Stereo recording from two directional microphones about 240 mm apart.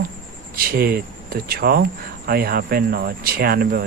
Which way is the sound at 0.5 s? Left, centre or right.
Right.